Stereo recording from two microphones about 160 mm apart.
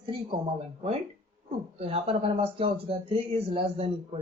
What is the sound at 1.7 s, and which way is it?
Speech, 35° right (ahead or behind).